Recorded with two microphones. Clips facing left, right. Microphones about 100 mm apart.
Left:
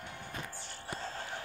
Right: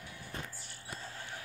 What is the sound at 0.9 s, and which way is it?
Music, 80° left.